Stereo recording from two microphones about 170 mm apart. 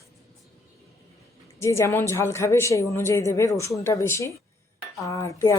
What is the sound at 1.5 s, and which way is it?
Speech, 15° left (ahead or behind).